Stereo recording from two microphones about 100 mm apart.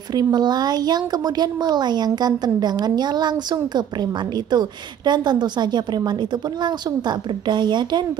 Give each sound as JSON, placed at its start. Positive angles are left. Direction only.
{"t": 0.1, "sound": "speech", "side_deg": -45}